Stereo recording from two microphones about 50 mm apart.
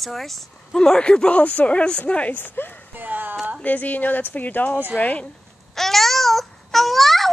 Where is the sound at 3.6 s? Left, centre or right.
Left.